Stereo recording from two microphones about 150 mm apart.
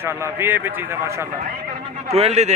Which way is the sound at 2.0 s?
45° right (ahead or behind).